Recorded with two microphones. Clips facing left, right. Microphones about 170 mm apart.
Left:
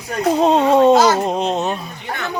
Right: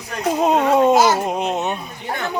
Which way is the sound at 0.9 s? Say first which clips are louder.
Left 2 dB; 10° right (ahead or behind).